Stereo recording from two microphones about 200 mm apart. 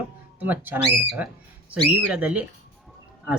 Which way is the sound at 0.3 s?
10° right (ahead or behind).